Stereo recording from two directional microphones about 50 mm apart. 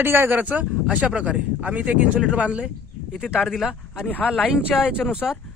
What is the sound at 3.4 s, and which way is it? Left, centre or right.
Speech, centre.